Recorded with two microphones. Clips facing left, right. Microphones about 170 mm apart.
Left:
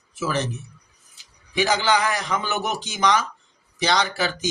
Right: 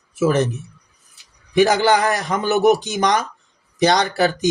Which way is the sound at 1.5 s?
55° right (ahead or behind).